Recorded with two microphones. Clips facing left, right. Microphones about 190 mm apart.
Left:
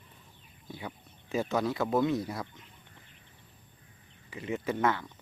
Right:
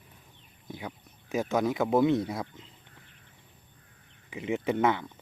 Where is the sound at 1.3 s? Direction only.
15° right (ahead or behind).